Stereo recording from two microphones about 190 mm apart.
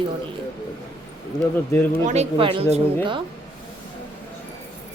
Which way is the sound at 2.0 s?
35° right (ahead or behind).